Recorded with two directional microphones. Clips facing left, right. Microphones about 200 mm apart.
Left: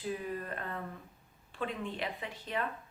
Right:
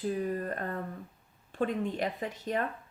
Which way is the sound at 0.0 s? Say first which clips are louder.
Right 6 dB; 40° right (ahead or behind).